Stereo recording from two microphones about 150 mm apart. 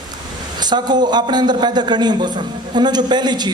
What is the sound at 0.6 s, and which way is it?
A man's voice, 30° right (ahead or behind).